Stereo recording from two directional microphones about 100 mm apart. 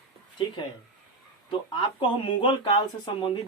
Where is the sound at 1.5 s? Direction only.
55° left (ahead or behind).